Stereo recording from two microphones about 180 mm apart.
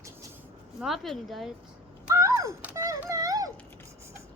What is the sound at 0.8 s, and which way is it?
Speech, centre (ahead or behind).